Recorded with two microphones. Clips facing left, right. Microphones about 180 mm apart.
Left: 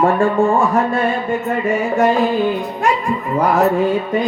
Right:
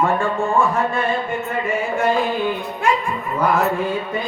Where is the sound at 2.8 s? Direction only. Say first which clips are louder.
Left 3 dB; 40° left (ahead or behind).